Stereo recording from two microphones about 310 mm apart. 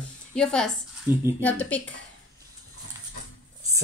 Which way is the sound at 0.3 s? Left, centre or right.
Centre.